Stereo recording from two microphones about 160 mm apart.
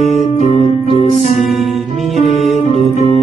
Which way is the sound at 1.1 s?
45° left (ahead or behind).